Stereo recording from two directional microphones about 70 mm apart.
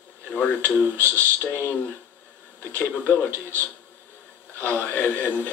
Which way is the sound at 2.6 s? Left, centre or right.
Left.